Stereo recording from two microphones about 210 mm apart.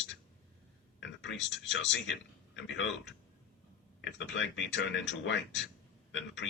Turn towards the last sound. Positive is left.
turn(degrees=60)  # may be behind; listen again after turning